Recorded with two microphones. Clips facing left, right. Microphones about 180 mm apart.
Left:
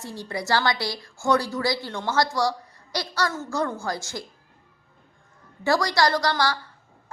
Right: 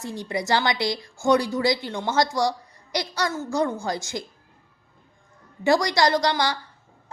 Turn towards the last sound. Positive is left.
turn(degrees=-20)  # may be behind; listen again after turning